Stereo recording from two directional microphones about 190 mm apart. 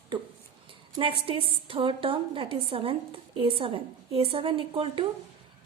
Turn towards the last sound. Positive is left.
turn(degrees=-30)  # may be behind; listen again after turning